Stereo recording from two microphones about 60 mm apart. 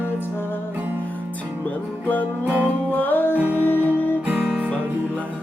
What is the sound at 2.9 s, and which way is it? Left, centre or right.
Music, left.